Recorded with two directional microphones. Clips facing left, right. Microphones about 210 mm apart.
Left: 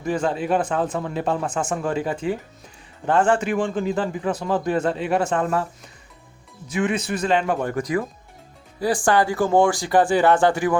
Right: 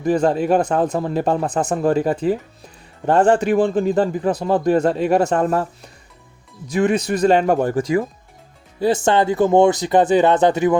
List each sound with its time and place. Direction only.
0.0 s a man's voice: 40° right (ahead or behind)
6.7 s a man's voice: 35° right (ahead or behind); by 10.8 s 20° right (ahead or behind)